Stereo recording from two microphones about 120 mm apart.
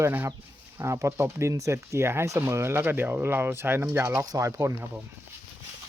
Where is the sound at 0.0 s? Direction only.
20° right (ahead or behind).